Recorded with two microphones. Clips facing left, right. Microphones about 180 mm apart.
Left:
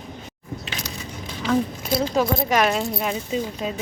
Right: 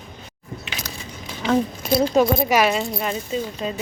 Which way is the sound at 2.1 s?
20° right (ahead or behind).